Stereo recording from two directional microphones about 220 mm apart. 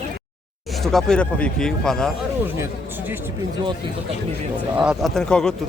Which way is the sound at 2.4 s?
10° right (ahead or behind).